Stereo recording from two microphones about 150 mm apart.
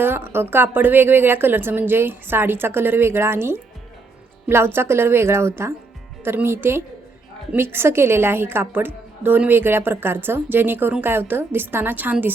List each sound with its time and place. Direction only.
0.0 s a woman's voice: 15° right (ahead or behind)